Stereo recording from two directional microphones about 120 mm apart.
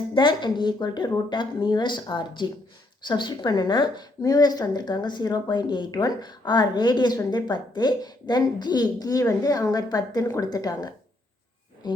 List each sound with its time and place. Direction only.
0.1 s a woman's voice: 40° left (ahead or behind)